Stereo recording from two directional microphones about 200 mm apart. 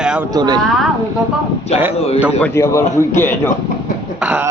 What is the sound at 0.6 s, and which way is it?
Speech, centre (ahead or behind).